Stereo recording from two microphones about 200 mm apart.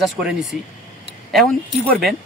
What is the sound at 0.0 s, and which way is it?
Speech, centre (ahead or behind).